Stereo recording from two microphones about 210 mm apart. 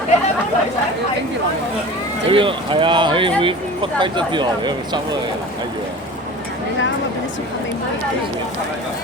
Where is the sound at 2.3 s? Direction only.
25° right (ahead or behind).